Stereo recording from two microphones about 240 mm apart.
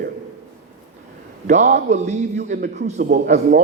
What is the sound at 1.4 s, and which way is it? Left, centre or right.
A man's voice, right.